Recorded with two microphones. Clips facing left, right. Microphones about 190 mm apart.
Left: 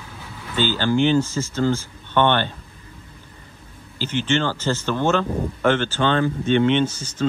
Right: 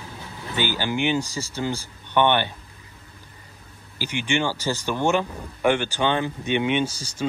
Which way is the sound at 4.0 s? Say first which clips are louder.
Left 3 dB; 15° right (ahead or behind).